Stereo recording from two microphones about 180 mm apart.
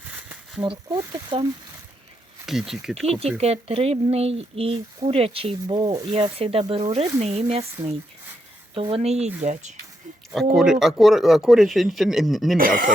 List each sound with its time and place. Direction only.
0.6 s speech: 25° right (ahead or behind)
2.5 s speech: centre (ahead or behind)
3.3 s speech: 35° right (ahead or behind); by 6.1 s 20° right (ahead or behind)
6.1 s speech: 30° right (ahead or behind)
8.7 s speech: 30° right (ahead or behind)
10.3 s speech: centre (ahead or behind)
12.5 s speech: 50° right (ahead or behind)